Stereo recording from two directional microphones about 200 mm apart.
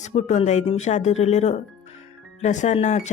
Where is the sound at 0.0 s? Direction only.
35° left (ahead or behind).